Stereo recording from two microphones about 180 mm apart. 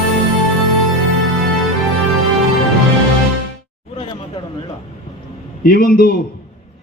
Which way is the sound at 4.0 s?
30° left (ahead or behind).